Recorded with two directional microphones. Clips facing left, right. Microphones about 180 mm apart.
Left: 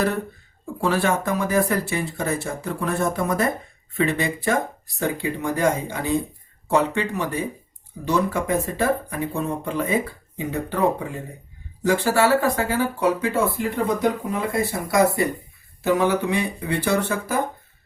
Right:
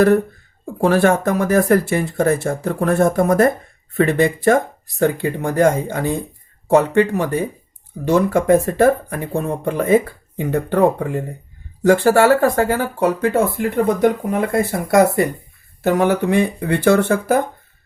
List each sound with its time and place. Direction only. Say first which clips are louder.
0.6 s speech: right 7 dB; 50° right (ahead or behind)